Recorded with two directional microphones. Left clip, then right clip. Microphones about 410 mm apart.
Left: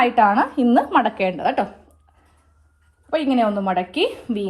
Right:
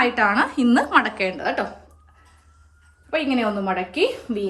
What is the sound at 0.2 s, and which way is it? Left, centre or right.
A woman's voice, centre.